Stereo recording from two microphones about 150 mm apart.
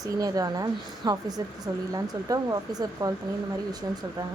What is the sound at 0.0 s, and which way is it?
Speech, 25° right (ahead or behind).